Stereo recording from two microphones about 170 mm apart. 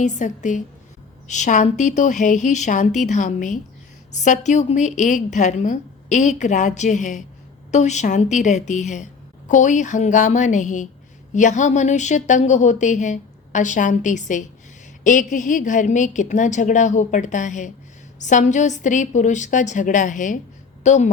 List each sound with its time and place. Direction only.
0.0 s a woman's voice: 45° left (ahead or behind)